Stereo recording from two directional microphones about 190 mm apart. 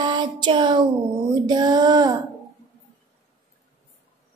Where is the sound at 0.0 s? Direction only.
25° right (ahead or behind).